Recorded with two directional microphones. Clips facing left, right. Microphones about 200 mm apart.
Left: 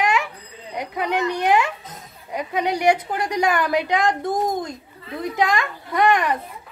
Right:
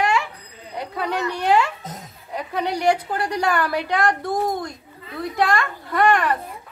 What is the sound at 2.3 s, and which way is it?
A woman's voice, 15° left (ahead or behind).